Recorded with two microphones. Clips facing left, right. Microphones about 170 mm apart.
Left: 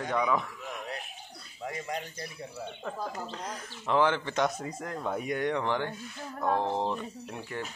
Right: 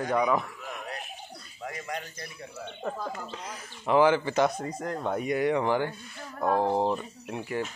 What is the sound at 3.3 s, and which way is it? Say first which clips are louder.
Speech: left 1 dB; 5° right (ahead or behind).